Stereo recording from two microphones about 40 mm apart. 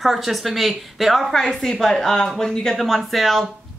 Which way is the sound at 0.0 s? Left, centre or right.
Centre.